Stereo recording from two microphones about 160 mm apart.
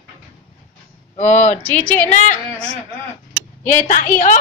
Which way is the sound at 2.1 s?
50° left (ahead or behind).